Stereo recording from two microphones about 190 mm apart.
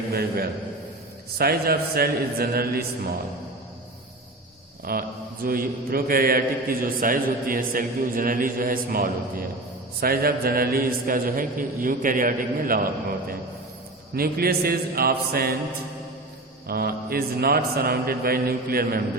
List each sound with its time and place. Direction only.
0.1 s a man's voice: 55° right (ahead or behind)
4.9 s a man's voice: 50° right (ahead or behind)
14.2 s a man's voice: 50° right (ahead or behind)
16.6 s a man's voice: 55° right (ahead or behind)